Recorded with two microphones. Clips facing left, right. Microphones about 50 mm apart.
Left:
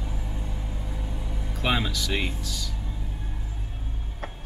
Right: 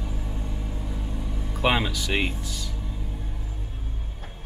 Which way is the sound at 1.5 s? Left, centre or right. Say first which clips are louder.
Right 3 dB; centre.